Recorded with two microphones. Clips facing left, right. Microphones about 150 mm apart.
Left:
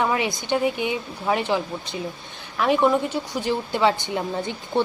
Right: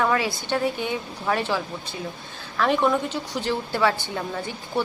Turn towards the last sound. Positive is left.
turn(degrees=20)  # may be behind; listen again after turning